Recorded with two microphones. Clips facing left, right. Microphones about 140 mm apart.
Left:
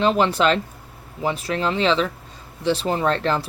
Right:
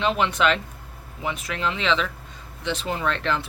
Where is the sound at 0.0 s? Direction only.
35° left (ahead or behind).